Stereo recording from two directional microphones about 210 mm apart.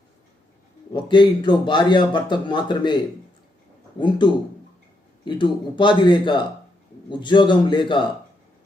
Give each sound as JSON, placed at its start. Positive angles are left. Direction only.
{"t": 0.9, "sound": "speech", "side_deg": 20}